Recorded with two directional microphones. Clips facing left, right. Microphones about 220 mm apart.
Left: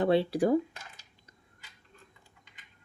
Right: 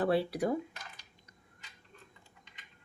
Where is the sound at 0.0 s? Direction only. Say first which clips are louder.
Left 4 dB; 25° left (ahead or behind).